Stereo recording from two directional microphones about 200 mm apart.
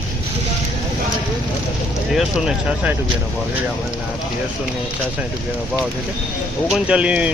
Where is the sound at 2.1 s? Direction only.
Centre (ahead or behind).